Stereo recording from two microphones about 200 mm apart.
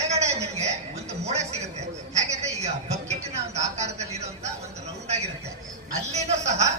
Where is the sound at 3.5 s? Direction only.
35° right (ahead or behind).